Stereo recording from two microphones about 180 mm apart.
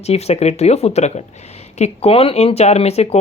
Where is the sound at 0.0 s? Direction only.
35° left (ahead or behind).